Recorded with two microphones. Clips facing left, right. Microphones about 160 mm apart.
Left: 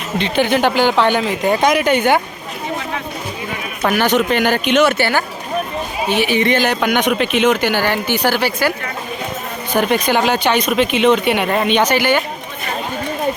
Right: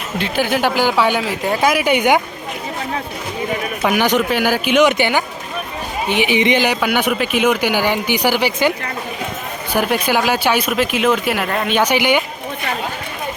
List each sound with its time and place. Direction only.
0.2 s speech: 5° right (ahead or behind)
3.8 s speech: 10° right (ahead or behind)
9.7 s speech: 5° right (ahead or behind)
11.8 s speech: 15° right (ahead or behind)